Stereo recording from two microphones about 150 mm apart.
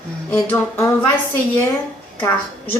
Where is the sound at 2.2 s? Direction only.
15° left (ahead or behind).